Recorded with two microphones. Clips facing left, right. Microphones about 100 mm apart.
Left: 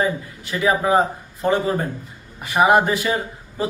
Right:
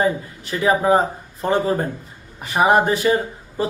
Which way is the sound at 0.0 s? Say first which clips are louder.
Right 2 dB; 35° right (ahead or behind).